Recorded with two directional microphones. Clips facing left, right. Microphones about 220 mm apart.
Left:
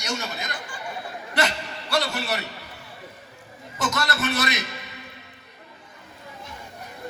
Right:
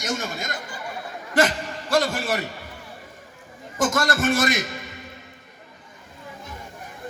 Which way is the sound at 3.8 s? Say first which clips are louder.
Right 5 dB; 50° right (ahead or behind).